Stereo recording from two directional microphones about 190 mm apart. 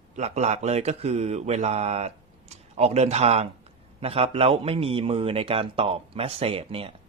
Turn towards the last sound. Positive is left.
turn(degrees=-30)  # may be behind; listen again after turning